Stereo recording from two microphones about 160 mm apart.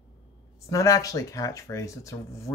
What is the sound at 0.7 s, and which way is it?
Speech, 20° left (ahead or behind).